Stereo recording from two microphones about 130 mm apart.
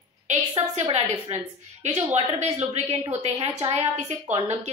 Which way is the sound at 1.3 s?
55° right (ahead or behind).